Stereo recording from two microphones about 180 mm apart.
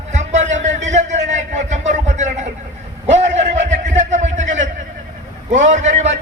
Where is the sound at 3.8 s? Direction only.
40° right (ahead or behind).